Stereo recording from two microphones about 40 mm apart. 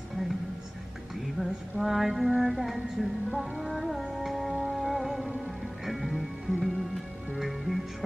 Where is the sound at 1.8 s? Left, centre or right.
Centre.